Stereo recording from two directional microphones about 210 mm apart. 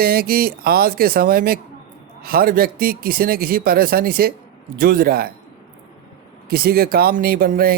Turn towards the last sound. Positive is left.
turn(degrees=-45)  # may be behind; listen again after turning